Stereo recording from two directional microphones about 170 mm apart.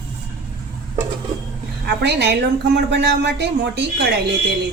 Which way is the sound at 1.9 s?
90° right.